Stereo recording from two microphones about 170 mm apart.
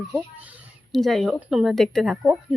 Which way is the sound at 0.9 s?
Centre (ahead or behind).